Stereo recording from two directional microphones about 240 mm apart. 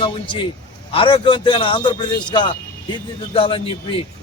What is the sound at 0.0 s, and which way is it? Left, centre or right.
A man's voice, centre.